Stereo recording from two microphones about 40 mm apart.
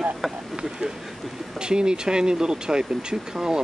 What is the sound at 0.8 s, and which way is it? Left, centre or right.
Speech, centre.